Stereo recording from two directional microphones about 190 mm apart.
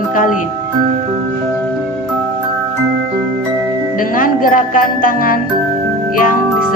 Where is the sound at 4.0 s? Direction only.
45° left (ahead or behind).